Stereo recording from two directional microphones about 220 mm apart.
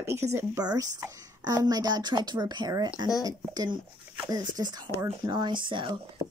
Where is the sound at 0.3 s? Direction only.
15° right (ahead or behind).